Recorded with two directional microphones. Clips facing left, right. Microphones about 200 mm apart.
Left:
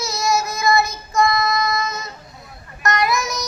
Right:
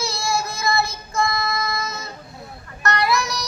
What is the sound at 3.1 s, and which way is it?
Child singing, 20° left (ahead or behind).